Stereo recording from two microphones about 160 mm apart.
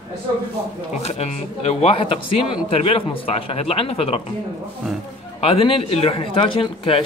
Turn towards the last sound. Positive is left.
turn(degrees=35)  # may be behind; listen again after turning